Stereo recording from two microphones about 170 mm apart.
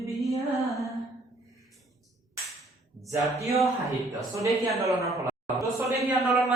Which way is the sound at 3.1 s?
20° right (ahead or behind).